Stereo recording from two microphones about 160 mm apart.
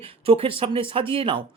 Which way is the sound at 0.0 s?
35° right (ahead or behind).